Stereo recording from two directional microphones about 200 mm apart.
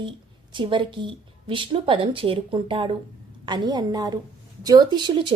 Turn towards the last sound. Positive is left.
turn(degrees=-20)  # may be behind; listen again after turning